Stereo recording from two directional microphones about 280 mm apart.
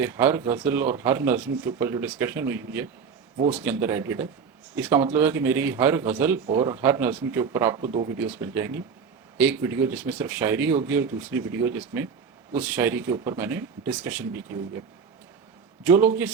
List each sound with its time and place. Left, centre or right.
0.0 s speech: centre
15.8 s speech: centre